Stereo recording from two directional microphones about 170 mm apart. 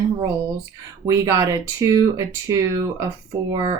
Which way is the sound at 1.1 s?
20° right (ahead or behind).